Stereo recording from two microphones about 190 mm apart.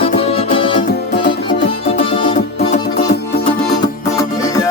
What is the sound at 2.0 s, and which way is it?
Music, 25° left (ahead or behind).